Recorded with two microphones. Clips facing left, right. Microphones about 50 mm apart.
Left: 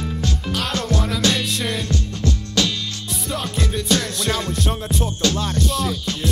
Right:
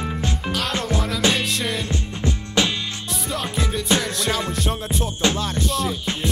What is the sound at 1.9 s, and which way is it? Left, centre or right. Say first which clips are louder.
Music: left 2 dB; right.